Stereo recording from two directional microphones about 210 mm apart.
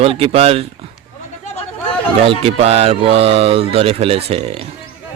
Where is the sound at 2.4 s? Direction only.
30° right (ahead or behind).